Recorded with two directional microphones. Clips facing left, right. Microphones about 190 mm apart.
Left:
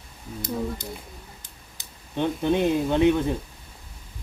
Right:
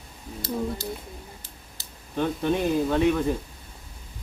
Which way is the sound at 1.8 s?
20° left (ahead or behind).